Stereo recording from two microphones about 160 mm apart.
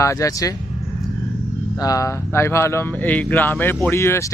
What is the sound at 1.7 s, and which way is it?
Speech, 20° left (ahead or behind).